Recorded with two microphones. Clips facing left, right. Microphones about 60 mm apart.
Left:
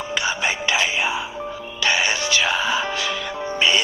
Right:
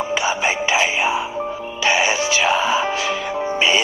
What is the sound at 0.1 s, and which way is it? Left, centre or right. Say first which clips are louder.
Music: even; right.